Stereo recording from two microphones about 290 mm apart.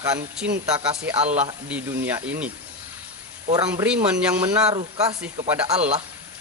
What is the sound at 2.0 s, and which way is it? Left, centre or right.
Speech, centre.